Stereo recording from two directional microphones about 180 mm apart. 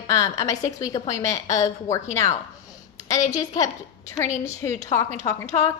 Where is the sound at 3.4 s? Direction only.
20° left (ahead or behind).